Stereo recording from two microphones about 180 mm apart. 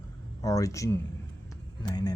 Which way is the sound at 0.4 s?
20° left (ahead or behind).